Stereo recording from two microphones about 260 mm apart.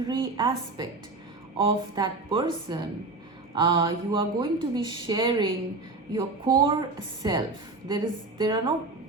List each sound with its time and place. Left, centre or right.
0.1 s speech: centre